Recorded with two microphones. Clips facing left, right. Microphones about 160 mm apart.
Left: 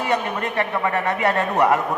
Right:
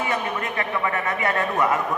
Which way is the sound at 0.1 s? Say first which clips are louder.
Left 3 dB; 35° left (ahead or behind).